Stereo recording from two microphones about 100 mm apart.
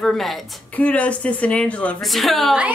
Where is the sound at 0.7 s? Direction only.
15° left (ahead or behind).